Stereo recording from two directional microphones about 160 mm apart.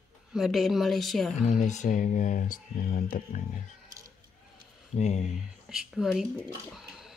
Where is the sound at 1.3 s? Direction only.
45° left (ahead or behind).